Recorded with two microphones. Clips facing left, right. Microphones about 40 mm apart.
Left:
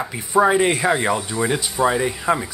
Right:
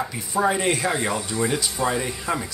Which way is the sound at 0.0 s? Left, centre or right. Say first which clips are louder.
Left 5 dB; left.